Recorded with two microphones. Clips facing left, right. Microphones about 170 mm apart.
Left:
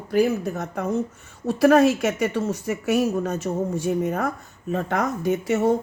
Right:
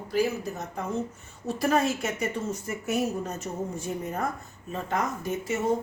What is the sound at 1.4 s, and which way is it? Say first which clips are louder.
Speech: left 9 dB; 75° left (ahead or behind).